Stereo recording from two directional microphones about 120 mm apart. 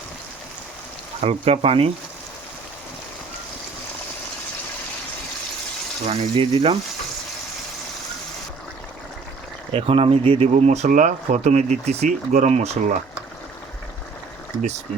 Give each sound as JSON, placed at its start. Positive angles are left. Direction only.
{"t": 1.2, "sound": "speech", "side_deg": -60}
{"t": 6.1, "sound": "speech", "side_deg": -50}
{"t": 9.7, "sound": "speech", "side_deg": -55}
{"t": 10.5, "sound": "speech", "side_deg": -70}